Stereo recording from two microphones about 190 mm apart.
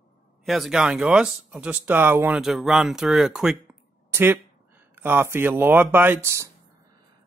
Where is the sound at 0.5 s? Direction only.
Centre (ahead or behind).